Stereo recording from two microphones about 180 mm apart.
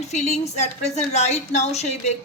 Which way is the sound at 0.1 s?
40° left (ahead or behind).